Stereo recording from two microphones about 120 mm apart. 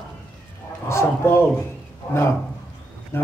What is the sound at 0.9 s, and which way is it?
A man's voice, 20° left (ahead or behind).